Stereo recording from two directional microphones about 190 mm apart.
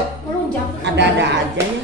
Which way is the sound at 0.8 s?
65° right (ahead or behind).